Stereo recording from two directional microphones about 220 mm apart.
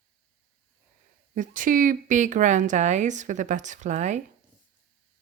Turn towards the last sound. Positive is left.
turn(degrees=-30)  # may be behind; listen again after turning